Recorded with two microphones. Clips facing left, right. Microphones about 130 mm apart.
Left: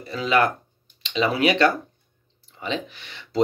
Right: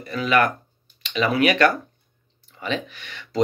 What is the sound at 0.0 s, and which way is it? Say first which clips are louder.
Speech: right 1 dB; 25° left (ahead or behind).